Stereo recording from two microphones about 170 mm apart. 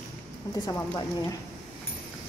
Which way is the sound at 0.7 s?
20° left (ahead or behind).